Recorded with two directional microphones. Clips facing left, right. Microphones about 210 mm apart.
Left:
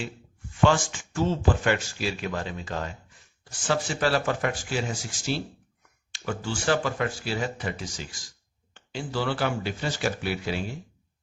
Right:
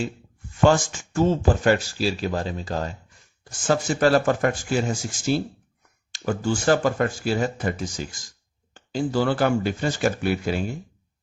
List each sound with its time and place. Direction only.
0.6 s speech: 45° right (ahead or behind)